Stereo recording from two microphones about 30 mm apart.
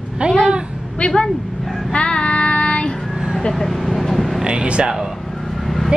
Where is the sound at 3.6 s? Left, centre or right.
Centre.